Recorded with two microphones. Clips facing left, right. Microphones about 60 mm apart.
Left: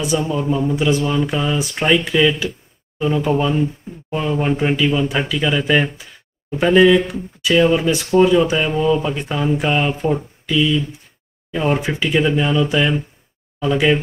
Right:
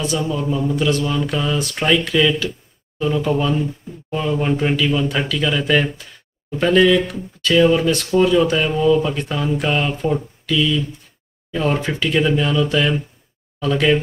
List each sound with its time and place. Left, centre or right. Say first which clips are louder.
0.2 s speech: left 2 dB; centre